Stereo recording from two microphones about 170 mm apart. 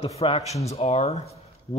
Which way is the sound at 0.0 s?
35° left (ahead or behind).